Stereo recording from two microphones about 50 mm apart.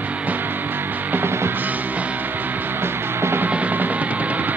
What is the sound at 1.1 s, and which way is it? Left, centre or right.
Music, right.